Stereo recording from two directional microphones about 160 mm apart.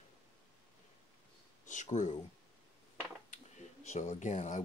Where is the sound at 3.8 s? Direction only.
45° left (ahead or behind).